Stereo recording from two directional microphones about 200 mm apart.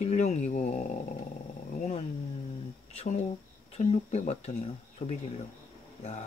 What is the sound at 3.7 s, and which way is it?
Speech, 35° left (ahead or behind).